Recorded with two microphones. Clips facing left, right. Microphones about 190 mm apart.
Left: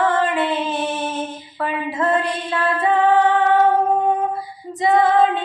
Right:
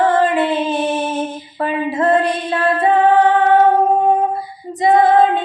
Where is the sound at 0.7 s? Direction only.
15° right (ahead or behind).